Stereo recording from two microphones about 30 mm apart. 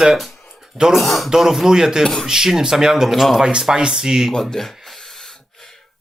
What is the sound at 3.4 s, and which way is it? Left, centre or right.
Speech, right.